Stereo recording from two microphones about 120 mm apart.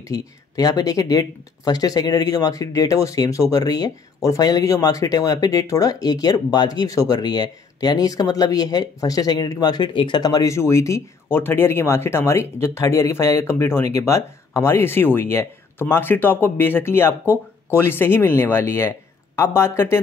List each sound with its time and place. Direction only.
0.0 s speech: 30° left (ahead or behind)